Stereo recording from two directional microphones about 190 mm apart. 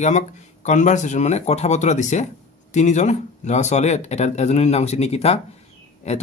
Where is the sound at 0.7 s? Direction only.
40° left (ahead or behind).